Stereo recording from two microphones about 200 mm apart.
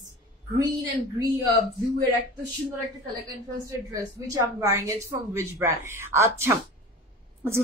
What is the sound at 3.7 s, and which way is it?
A woman's voice, 15° right (ahead or behind).